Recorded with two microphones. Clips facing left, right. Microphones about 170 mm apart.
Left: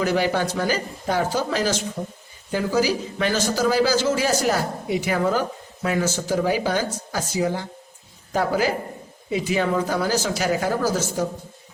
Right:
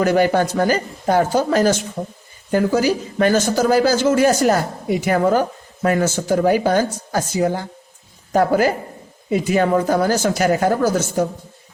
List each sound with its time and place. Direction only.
0.0 s a man's voice: 50° right (ahead or behind)